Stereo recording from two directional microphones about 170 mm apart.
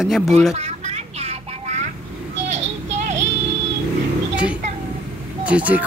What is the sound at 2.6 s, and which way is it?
Child singing, 45° right (ahead or behind).